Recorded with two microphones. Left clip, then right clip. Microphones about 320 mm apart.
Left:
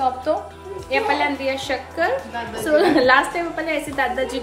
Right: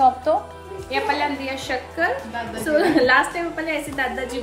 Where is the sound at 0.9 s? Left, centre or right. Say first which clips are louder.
Left 2 dB; centre.